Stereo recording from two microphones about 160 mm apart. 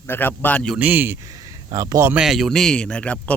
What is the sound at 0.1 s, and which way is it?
Speech, 10° left (ahead or behind).